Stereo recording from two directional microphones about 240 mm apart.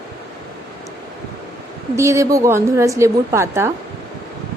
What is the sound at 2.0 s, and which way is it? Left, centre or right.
A woman's voice, centre.